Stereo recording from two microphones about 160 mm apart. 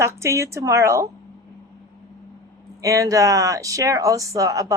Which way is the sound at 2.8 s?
20° right (ahead or behind).